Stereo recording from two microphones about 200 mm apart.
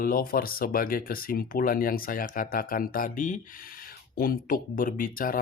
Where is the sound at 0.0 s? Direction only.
45° left (ahead or behind).